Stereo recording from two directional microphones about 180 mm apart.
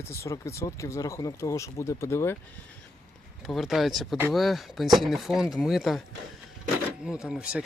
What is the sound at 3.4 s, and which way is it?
Speech, centre (ahead or behind).